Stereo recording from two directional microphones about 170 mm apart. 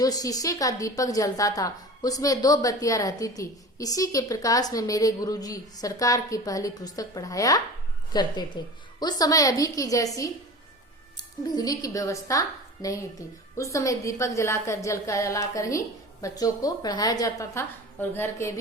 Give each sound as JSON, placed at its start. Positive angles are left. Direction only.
{"t": 0.0, "sound": "a woman's voice", "side_deg": 20}